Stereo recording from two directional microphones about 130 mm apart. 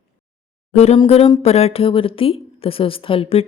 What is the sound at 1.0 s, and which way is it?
A woman's voice, 50° left (ahead or behind).